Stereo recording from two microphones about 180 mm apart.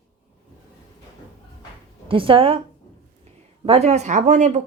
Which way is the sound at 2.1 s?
30° right (ahead or behind).